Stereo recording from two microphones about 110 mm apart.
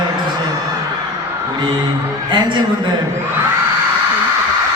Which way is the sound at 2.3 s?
45° right (ahead or behind).